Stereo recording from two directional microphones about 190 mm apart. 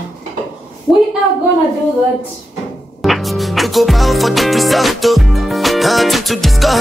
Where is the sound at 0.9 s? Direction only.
Centre (ahead or behind).